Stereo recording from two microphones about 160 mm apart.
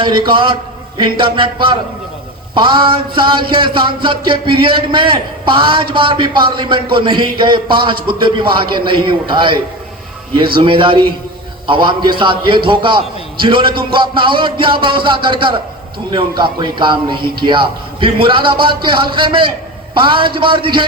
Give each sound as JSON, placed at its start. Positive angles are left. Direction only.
{"t": 0.0, "sound": "a man's voice", "side_deg": -30}